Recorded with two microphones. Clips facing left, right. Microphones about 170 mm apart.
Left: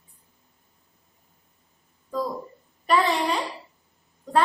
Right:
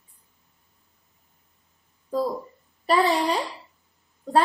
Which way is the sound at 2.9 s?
35° right (ahead or behind).